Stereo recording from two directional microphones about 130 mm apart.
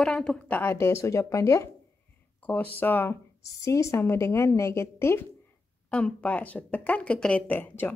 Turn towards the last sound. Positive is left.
turn(degrees=15)  # may be behind; listen again after turning